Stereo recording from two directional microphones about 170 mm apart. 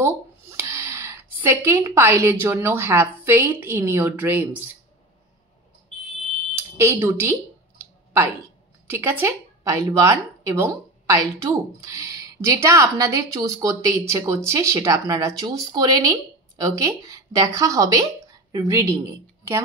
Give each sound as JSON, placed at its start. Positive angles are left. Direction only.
{"t": 0.0, "sound": "speech", "side_deg": -15}
{"t": 6.5, "sound": "speech", "side_deg": -15}
{"t": 8.8, "sound": "a woman's voice", "side_deg": -15}